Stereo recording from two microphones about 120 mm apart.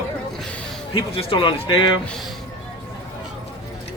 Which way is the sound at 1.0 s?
45° left (ahead or behind).